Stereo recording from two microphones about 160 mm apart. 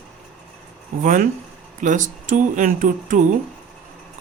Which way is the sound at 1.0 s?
55° right (ahead or behind).